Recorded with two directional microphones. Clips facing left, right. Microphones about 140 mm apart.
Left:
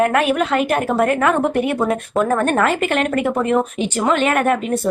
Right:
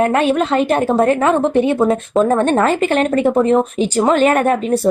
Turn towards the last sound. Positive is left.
turn(degrees=-35)  # may be behind; listen again after turning